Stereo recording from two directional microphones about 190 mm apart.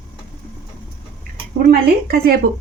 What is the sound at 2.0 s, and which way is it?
Speech, 55° right (ahead or behind).